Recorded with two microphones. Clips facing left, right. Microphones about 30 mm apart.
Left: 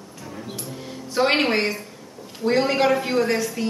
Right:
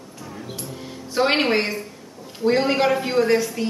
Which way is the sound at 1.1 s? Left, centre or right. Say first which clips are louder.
Right 1 dB; centre.